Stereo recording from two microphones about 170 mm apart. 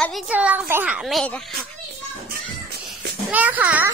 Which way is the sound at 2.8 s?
10° right (ahead or behind).